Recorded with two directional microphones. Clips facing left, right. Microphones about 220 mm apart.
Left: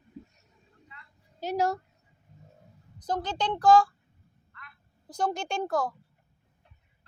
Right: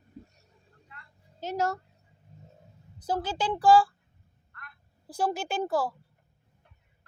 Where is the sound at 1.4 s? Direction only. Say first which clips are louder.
Left 2 dB; 15° left (ahead or behind).